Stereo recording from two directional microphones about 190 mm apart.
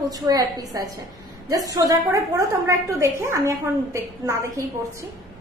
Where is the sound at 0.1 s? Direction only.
20° right (ahead or behind).